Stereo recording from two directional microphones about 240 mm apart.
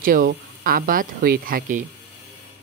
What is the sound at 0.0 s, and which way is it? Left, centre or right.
Speech, right.